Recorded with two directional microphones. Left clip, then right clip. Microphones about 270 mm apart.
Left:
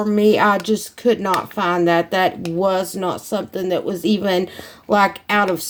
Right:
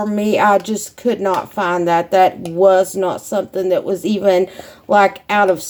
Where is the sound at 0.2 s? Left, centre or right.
Left.